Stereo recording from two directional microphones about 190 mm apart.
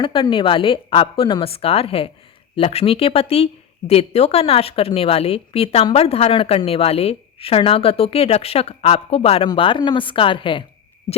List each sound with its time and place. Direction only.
0.0 s a woman's voice: 25° left (ahead or behind)